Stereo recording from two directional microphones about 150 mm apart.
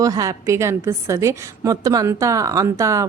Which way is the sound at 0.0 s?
20° right (ahead or behind).